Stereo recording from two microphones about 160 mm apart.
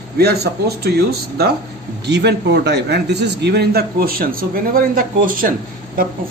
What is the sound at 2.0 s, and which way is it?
A man's voice, 90° right.